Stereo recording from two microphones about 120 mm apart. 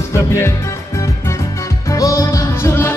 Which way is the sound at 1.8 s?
25° left (ahead or behind).